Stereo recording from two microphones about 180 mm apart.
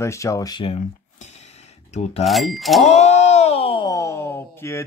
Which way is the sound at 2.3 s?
Centre (ahead or behind).